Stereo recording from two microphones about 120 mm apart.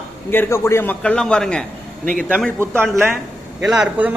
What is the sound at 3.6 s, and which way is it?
Speech, 5° right (ahead or behind).